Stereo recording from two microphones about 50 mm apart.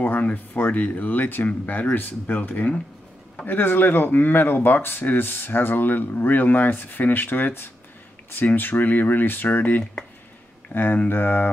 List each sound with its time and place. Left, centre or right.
0.6 s speech: left
3.4 s speech: left